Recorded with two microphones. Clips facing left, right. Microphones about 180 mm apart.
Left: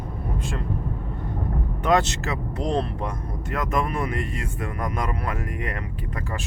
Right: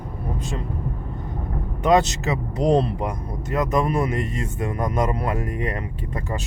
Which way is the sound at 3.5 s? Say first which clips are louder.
Right 5 dB; 20° right (ahead or behind).